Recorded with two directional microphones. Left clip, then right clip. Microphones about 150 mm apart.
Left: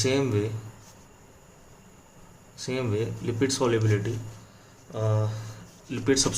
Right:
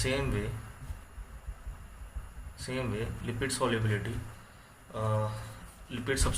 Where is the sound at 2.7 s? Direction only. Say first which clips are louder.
Left 7 dB; 50° left (ahead or behind).